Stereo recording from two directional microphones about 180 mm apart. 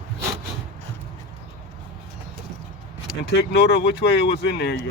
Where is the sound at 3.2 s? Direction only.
70° left (ahead or behind).